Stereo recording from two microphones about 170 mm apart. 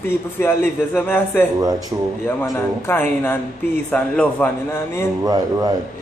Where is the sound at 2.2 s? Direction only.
10° left (ahead or behind).